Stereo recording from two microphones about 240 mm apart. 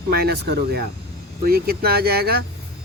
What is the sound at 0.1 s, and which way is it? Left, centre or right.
Speech, right.